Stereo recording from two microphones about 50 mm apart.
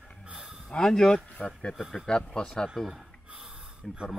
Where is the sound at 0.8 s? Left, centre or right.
Centre.